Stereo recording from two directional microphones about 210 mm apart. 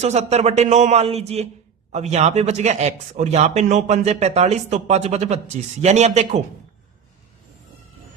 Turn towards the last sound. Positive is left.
turn(degrees=-30)  # may be behind; listen again after turning